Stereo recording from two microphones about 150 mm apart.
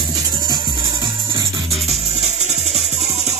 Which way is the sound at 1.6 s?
45° right (ahead or behind).